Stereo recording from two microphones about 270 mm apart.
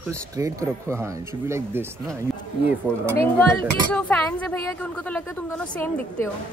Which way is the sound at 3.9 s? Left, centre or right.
Centre.